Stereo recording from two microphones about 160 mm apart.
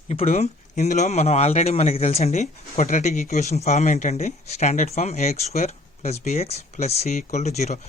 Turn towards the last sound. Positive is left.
turn(degrees=45)  # may be behind; listen again after turning